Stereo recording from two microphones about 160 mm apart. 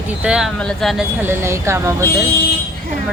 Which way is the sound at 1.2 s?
15° right (ahead or behind).